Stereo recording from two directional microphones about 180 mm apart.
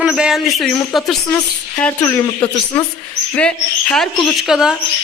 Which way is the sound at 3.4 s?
5° left (ahead or behind).